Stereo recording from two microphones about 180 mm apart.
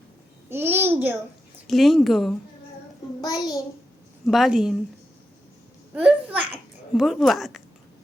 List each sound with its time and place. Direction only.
0.5 s a child's voice: 10° right (ahead or behind)
1.6 s speech: centre (ahead or behind)
3.2 s a child's voice: 20° left (ahead or behind)
4.3 s speech: centre (ahead or behind)
5.9 s a child's voice: 10° right (ahead or behind)